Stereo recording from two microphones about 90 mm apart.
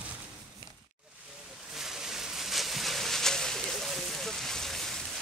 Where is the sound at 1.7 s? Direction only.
5° right (ahead or behind).